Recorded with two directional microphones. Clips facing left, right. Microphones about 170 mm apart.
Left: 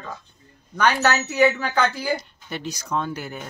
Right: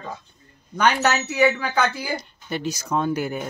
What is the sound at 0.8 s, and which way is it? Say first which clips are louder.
Speech: even; 10° right (ahead or behind).